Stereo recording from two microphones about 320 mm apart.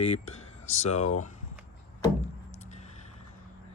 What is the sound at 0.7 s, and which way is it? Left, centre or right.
Speech, centre.